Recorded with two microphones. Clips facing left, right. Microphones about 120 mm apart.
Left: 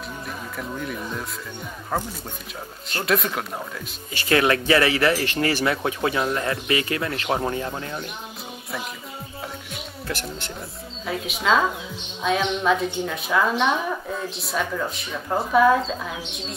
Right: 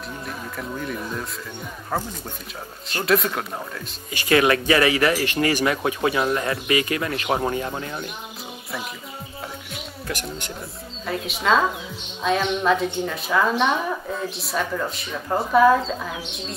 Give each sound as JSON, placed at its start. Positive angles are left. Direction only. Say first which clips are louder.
{"t": 0.6, "sound": "a woman's voice", "louder": "right 1 dB", "side_deg": 0}
{"t": 3.1, "sound": "a woman's voice", "louder": "right 2 dB", "side_deg": 0}
{"t": 4.1, "sound": "speech", "louder": "right 2 dB", "side_deg": -15}
{"t": 11.1, "sound": "a woman's voice", "louder": "right 1 dB", "side_deg": 0}